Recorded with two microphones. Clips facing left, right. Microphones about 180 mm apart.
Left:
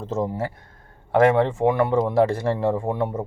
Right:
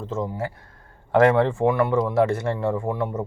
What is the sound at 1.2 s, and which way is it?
A man's voice, 20° left (ahead or behind).